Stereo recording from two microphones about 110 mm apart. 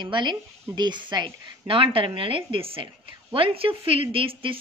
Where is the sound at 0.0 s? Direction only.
45° right (ahead or behind).